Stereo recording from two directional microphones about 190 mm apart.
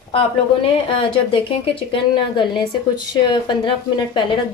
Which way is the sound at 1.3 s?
25° left (ahead or behind).